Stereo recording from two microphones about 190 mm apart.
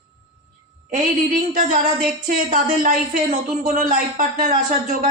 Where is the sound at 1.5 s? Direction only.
45° right (ahead or behind).